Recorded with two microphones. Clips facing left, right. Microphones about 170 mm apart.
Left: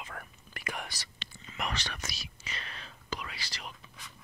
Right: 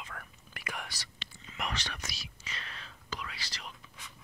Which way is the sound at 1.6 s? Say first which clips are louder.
Left 1 dB; 45° left (ahead or behind).